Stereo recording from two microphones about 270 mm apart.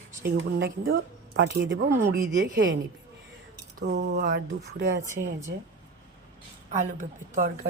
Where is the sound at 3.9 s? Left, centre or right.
Right.